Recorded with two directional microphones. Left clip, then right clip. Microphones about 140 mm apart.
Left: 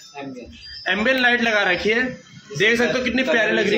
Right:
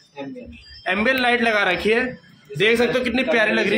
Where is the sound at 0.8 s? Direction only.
5° right (ahead or behind).